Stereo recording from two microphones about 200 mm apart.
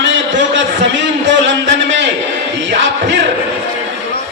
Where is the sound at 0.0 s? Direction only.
65° right (ahead or behind).